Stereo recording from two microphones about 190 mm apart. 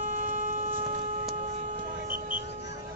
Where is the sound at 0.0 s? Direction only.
40° right (ahead or behind).